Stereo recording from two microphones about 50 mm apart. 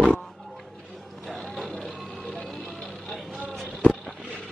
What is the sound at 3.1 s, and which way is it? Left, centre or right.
Vehicle, centre.